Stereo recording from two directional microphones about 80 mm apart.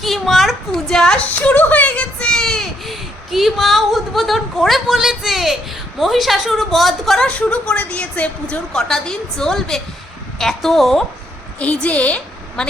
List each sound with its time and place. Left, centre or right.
0.0 s a sound: centre
6.0 s a woman's voice: centre
7.3 s a woman's voice: centre
11.6 s a woman's voice: centre